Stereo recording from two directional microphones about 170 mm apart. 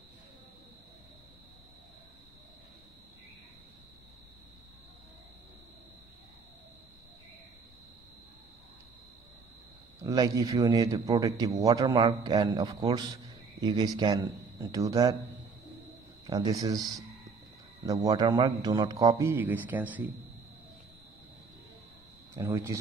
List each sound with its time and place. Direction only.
10.0 s a man's voice: 20° right (ahead or behind)
16.3 s a man's voice: 20° right (ahead or behind)
17.8 s a man's voice: 20° right (ahead or behind)
22.3 s speech: 15° right (ahead or behind)